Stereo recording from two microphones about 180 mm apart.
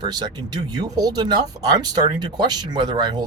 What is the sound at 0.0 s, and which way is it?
Speech, 25° right (ahead or behind).